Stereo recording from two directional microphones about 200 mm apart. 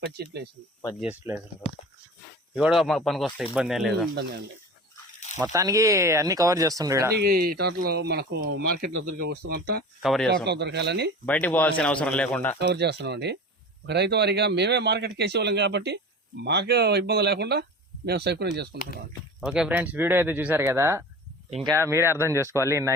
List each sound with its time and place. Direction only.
0.2 s speech: 50° right (ahead or behind)
1.0 s speech: 10° right (ahead or behind)
5.5 s speech: 15° right (ahead or behind)
7.2 s speech: 50° right (ahead or behind)
10.0 s speech: centre (ahead or behind)
10.4 s speech: 60° right (ahead or behind)
11.3 s a man's voice: 5° left (ahead or behind)
12.5 s speech: 55° right (ahead or behind)
19.4 s speech: 5° right (ahead or behind)